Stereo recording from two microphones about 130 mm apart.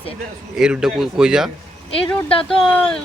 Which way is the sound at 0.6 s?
5° right (ahead or behind).